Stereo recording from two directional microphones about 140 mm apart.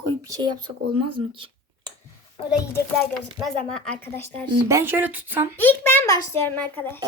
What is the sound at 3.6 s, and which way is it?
Speech, 5° left (ahead or behind).